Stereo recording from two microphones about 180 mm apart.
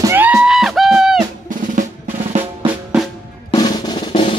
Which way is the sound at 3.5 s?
25° left (ahead or behind).